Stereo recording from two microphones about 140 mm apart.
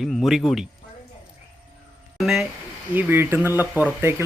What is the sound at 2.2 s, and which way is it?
Speech, 5° right (ahead or behind).